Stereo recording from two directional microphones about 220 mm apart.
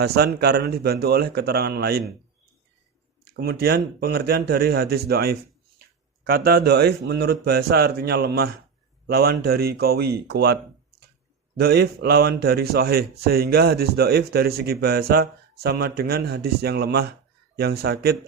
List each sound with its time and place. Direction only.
0.0 s speech: 45° right (ahead or behind)
3.2 s speech: 45° right (ahead or behind)